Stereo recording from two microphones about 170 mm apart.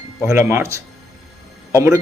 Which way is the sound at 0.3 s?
15° right (ahead or behind).